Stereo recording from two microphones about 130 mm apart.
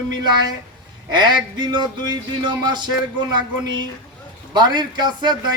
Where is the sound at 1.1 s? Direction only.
35° right (ahead or behind).